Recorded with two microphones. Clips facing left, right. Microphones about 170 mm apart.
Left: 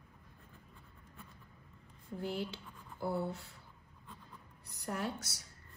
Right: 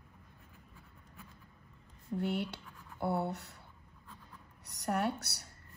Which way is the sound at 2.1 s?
70° right (ahead or behind).